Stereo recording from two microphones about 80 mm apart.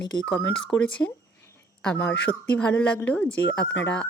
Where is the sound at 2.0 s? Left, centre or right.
Left.